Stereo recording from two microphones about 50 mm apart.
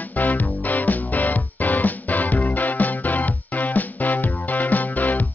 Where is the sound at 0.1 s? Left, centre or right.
Left.